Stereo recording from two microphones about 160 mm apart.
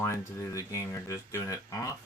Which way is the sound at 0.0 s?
15° left (ahead or behind).